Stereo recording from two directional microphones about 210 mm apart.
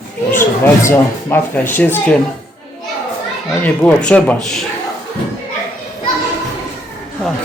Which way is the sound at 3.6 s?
5° left (ahead or behind).